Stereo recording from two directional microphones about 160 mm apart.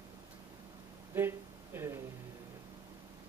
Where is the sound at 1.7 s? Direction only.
15° right (ahead or behind).